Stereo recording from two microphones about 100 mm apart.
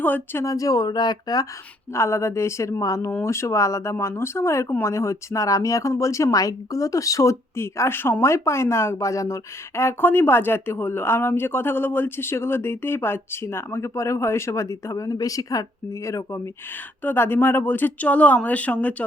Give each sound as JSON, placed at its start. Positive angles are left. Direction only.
{"t": 0.0, "sound": "speech", "side_deg": 20}
{"t": 0.4, "sound": "speech", "side_deg": 35}
{"t": 1.9, "sound": "speech", "side_deg": 25}